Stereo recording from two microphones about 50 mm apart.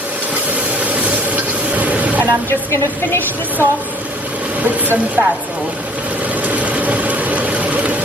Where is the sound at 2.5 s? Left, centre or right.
Left.